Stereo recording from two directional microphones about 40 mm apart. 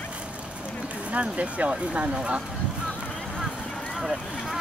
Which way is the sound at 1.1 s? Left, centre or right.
Right.